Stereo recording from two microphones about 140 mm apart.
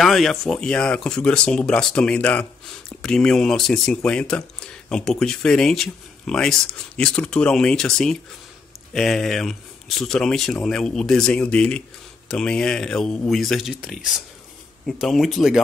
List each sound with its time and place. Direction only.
0.0 s speech: centre (ahead or behind)